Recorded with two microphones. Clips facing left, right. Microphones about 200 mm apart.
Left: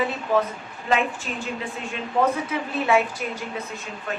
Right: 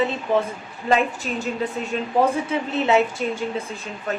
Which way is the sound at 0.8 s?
40° right (ahead or behind).